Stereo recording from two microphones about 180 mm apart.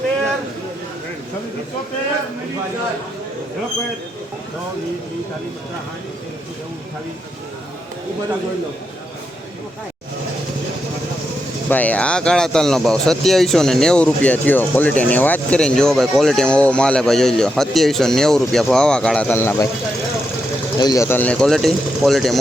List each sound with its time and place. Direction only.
11.7 s speech: 10° left (ahead or behind)
20.7 s speech: 20° left (ahead or behind); by 22.4 s centre (ahead or behind)